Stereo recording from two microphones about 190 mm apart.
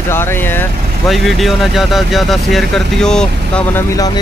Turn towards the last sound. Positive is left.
turn(degrees=15)  # may be behind; listen again after turning